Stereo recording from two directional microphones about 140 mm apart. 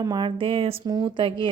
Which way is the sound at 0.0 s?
30° right (ahead or behind).